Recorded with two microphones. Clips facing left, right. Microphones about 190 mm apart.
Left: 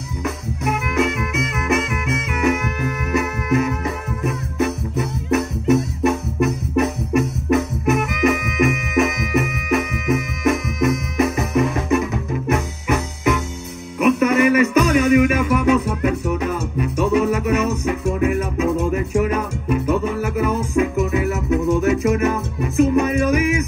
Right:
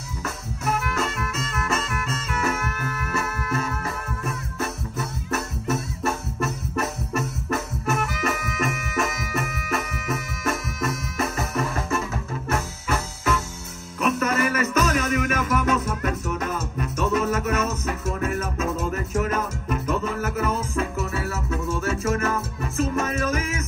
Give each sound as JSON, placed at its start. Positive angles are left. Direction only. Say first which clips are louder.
{"t": 0.2, "sound": "music", "louder": "left 7 dB", "side_deg": 15}
{"t": 10.4, "sound": "music", "louder": "left 8 dB", "side_deg": 15}